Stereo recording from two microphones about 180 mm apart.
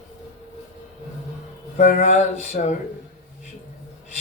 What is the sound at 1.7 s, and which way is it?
Speech, 40° left (ahead or behind).